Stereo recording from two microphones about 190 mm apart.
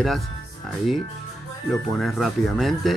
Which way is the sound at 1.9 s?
Centre (ahead or behind).